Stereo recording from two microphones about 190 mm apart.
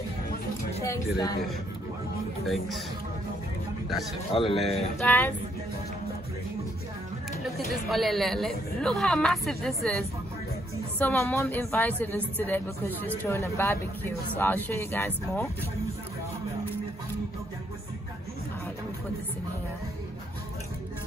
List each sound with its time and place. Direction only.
0.8 s speech: 20° left (ahead or behind)
2.4 s speech: centre (ahead or behind)
4.3 s speech: 30° left (ahead or behind)
5.0 s speech: 10° left (ahead or behind)
7.5 s speech: centre (ahead or behind)